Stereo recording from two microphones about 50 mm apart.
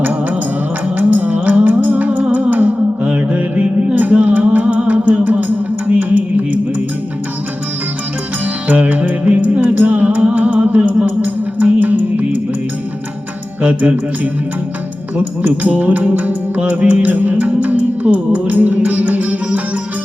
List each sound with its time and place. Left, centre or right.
0.9 s music: right
8.7 s music: right
13.6 s music: right
15.4 s music: right